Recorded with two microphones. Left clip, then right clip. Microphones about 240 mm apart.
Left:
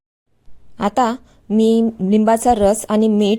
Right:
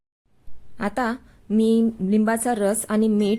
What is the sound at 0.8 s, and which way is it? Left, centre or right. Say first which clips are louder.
A woman's voice: left 8 dB; left.